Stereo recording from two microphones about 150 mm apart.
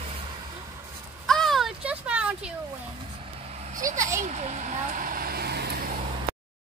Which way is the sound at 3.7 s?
60° right (ahead or behind).